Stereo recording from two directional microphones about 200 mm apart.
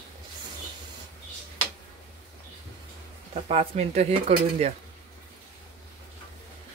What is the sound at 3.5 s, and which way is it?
Speech, 30° right (ahead or behind).